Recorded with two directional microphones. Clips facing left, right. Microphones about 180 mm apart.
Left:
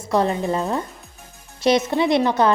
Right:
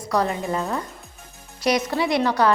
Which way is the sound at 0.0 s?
25° left (ahead or behind).